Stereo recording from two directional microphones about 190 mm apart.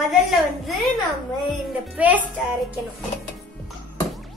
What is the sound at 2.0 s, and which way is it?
Speech, 10° right (ahead or behind).